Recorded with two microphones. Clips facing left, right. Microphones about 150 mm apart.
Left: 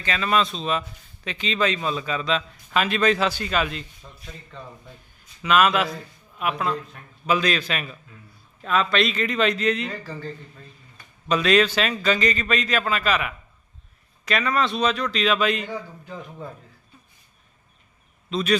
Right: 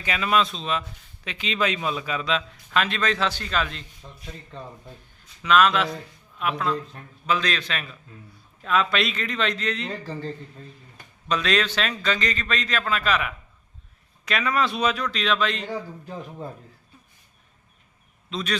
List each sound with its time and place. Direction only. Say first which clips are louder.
0.0 s speech: even; 10° right (ahead or behind); by 3.8 s 5° left (ahead or behind)
4.0 s speech: right 1 dB; 20° right (ahead or behind)
5.2 s a man's voice: even; 5° left (ahead or behind)
9.9 s speech: right 2 dB; 30° right (ahead or behind)
11.3 s speech: left 5 dB; 5° left (ahead or behind)
15.6 s speech: right 1 dB; 30° right (ahead or behind)
18.3 s a man's voice: left 5 dB; centre (ahead or behind)